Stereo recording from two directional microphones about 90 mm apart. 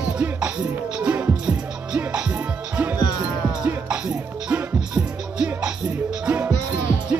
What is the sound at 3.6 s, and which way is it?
Music, 10° right (ahead or behind).